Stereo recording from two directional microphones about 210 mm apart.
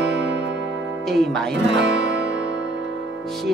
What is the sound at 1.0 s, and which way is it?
Speech, centre (ahead or behind).